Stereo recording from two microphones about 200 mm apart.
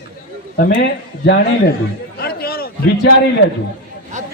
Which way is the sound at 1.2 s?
60° left (ahead or behind).